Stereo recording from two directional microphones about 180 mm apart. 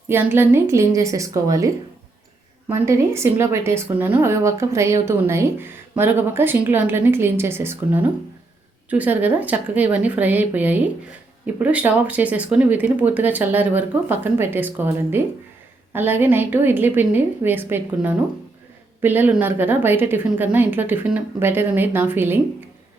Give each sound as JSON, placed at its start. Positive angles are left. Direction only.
{"t": 0.1, "sound": "a woman's voice", "side_deg": -10}